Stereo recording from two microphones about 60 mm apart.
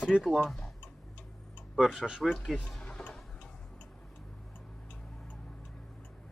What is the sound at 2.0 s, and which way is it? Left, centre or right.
Speech, centre.